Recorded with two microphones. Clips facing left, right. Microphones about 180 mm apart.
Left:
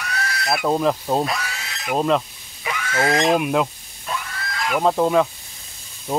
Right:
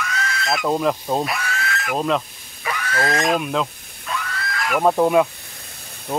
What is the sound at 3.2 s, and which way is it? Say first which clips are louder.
Fowl: left 2 dB; 15° left (ahead or behind).